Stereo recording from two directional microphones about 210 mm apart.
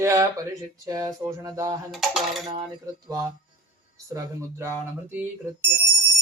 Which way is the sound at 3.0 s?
15° right (ahead or behind).